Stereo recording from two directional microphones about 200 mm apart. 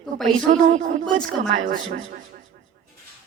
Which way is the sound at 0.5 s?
40° right (ahead or behind).